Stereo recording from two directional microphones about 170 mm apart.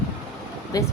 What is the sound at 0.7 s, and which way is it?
Speech, 20° left (ahead or behind).